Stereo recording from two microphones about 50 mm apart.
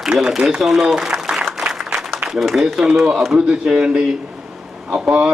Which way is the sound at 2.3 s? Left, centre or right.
Centre.